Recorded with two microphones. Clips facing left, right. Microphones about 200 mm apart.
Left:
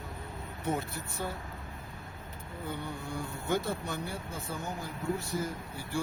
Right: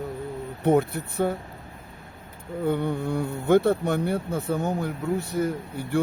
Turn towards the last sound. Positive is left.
turn(degrees=-60)  # may be behind; listen again after turning